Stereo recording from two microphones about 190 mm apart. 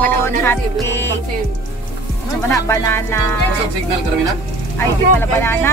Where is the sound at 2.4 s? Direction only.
15° left (ahead or behind).